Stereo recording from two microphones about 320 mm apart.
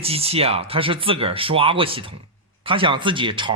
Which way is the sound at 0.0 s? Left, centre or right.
Centre.